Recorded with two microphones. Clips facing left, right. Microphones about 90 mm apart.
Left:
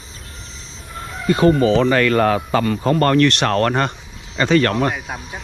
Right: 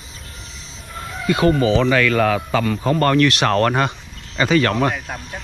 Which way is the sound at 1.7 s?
40° left (ahead or behind).